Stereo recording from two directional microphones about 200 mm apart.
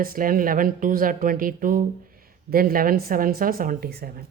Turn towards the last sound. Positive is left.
turn(degrees=-50)  # may be behind; listen again after turning